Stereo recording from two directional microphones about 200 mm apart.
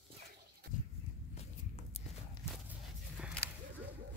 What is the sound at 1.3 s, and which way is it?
Walk, 30° left (ahead or behind).